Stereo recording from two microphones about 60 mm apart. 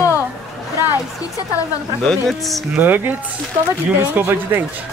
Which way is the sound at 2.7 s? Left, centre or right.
Right.